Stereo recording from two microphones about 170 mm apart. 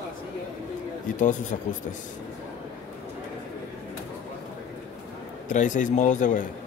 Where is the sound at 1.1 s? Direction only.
50° left (ahead or behind).